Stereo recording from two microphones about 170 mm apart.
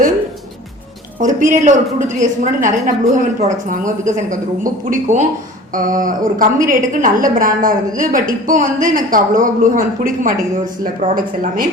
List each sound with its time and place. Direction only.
1.2 s a woman's voice: 50° right (ahead or behind)